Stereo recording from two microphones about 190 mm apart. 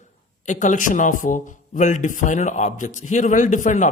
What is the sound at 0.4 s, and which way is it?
A man's voice, 40° left (ahead or behind).